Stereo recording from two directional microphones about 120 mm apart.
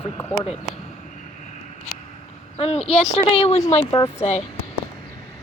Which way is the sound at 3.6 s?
70° left (ahead or behind).